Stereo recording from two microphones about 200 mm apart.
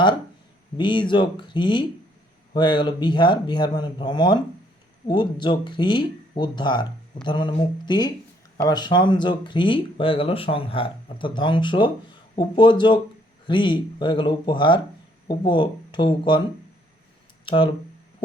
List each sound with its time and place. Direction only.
0.8 s speech: 25° left (ahead or behind)
17.4 s speech: 25° left (ahead or behind)